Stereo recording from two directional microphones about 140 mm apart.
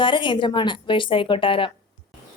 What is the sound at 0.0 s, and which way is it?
A woman's voice, 35° left (ahead or behind).